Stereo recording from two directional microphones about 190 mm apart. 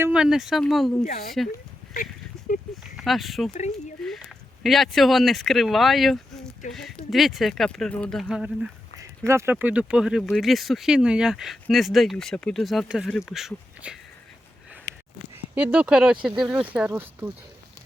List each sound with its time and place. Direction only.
0.0 s speech: 5° right (ahead or behind)
2.5 s a sound: 45° left (ahead or behind)
2.9 s speech: centre (ahead or behind)
4.6 s speech: centre (ahead or behind)
9.0 s speech: 15° right (ahead or behind)
14.9 s a sound: 15° left (ahead or behind)
15.5 s speech: 5° right (ahead or behind)